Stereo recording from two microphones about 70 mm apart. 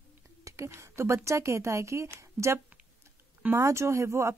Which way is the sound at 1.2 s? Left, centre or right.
Right.